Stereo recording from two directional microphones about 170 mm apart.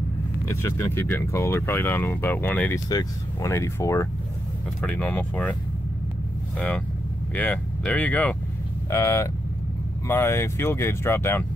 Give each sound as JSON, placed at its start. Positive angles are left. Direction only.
{"t": 0.6, "sound": "speech", "side_deg": 15}
{"t": 2.9, "sound": "speech", "side_deg": 20}
{"t": 7.3, "sound": "speech", "side_deg": 5}